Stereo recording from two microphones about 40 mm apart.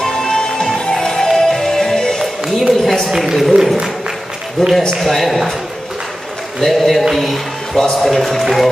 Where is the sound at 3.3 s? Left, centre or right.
Centre.